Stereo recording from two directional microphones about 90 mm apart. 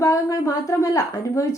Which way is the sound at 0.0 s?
35° left (ahead or behind).